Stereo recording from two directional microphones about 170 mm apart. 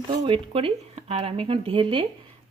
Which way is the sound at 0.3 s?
35° right (ahead or behind).